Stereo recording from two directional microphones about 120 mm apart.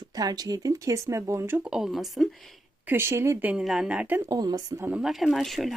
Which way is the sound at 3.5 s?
5° right (ahead or behind).